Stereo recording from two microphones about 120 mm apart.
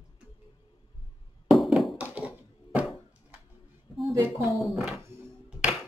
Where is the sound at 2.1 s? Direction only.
10° right (ahead or behind).